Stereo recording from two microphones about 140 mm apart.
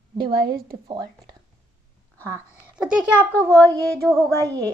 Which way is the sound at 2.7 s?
5° right (ahead or behind).